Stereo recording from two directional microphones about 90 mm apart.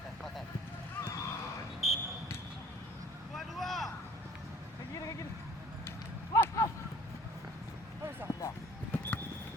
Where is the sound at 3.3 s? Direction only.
Centre (ahead or behind).